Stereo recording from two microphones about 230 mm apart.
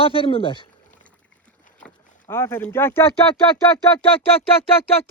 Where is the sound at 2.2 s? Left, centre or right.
Centre.